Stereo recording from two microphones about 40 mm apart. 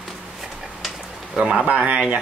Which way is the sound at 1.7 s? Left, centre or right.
Right.